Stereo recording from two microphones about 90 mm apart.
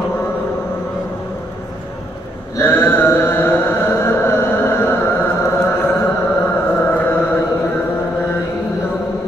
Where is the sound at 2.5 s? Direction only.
35° left (ahead or behind).